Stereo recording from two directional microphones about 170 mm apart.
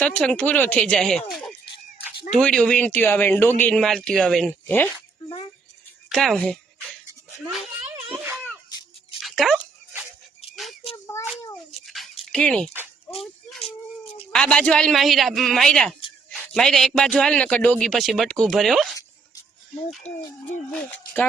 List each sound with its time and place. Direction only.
0.0 s a man's voice: 5° left (ahead or behind)
1.3 s music: centre (ahead or behind)
2.3 s a man's voice: 5° left (ahead or behind)
6.1 s a man's voice: centre (ahead or behind)
9.2 s dog: centre (ahead or behind)
10.5 s a sound: centre (ahead or behind)
10.9 s child singing: 15° left (ahead or behind)
11.9 s dog: centre (ahead or behind)
14.3 s a man's voice: 5° left (ahead or behind)
20.1 s a sound: 40° left (ahead or behind)
20.7 s speech: 10° left (ahead or behind)